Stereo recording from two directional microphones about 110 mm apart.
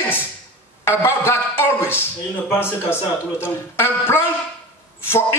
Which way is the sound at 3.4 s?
20° left (ahead or behind).